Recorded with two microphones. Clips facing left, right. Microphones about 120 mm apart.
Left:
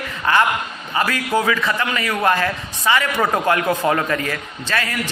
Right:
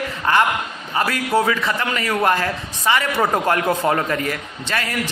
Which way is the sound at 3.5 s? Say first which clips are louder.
Even; 25° right (ahead or behind).